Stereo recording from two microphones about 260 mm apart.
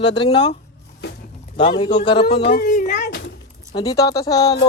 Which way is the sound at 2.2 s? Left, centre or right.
Left.